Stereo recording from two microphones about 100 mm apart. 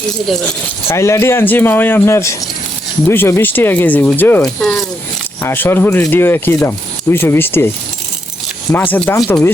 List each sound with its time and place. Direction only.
0.9 s speech: 30° left (ahead or behind)
4.4 s speech: 5° left (ahead or behind)
5.4 s speech: 25° left (ahead or behind)
8.7 s speech: 20° left (ahead or behind)